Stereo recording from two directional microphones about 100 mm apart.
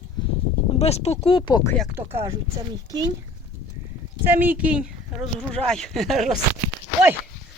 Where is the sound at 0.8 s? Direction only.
90° left; by 1.6 s 55° left (ahead or behind).